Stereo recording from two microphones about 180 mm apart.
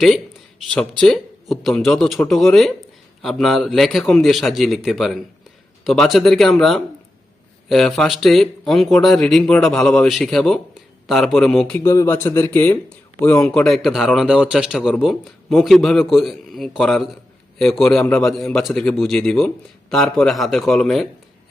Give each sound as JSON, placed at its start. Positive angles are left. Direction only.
{"t": 0.7, "sound": "speech", "side_deg": 5}
{"t": 11.8, "sound": "speech", "side_deg": 15}